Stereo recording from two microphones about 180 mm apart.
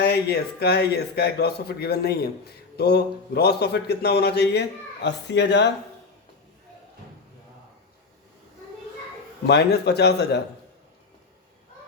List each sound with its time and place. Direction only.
0.0 s a man's voice: 65° left (ahead or behind)
9.5 s a man's voice: 70° left (ahead or behind)